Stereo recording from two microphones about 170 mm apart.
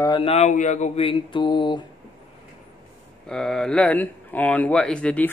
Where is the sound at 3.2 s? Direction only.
5° left (ahead or behind).